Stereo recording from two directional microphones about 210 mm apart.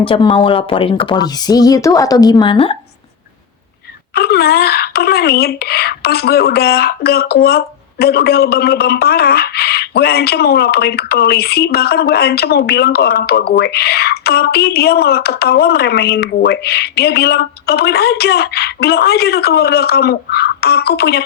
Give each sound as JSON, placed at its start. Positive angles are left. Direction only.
{"t": 0.0, "sound": "speech", "side_deg": 25}
{"t": 4.1, "sound": "speech", "side_deg": 50}